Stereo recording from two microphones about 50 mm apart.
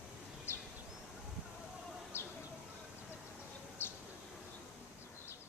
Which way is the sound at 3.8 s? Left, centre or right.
Left.